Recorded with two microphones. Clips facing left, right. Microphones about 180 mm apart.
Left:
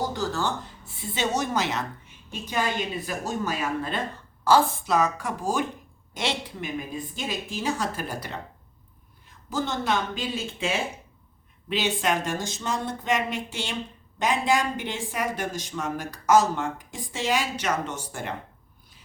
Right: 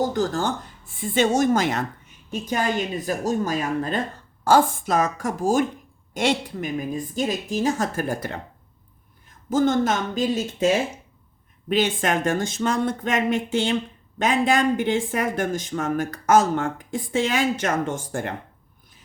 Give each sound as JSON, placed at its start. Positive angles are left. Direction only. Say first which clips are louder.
{"t": 0.0, "sound": "a woman's voice", "louder": "right 5 dB", "side_deg": -45}
{"t": 9.5, "sound": "a woman's voice", "louder": "right 7 dB", "side_deg": -50}